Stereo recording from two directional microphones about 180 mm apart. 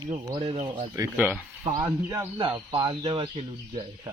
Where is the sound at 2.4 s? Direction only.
25° right (ahead or behind).